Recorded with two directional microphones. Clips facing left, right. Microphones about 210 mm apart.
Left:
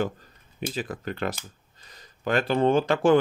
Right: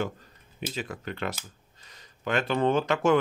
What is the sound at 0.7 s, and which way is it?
Speech, 35° left (ahead or behind).